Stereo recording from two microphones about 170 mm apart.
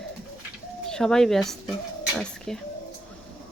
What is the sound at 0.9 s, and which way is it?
Speech, 5° left (ahead or behind).